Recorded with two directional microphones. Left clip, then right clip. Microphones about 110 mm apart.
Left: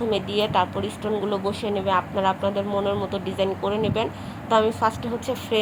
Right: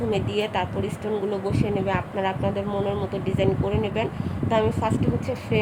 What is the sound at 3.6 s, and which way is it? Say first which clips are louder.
Speech: left 2 dB; 30° left (ahead or behind).